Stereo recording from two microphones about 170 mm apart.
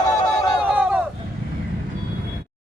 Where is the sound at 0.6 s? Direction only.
5° right (ahead or behind).